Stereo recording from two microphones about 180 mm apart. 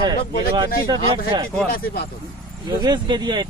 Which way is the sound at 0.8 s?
25° right (ahead or behind).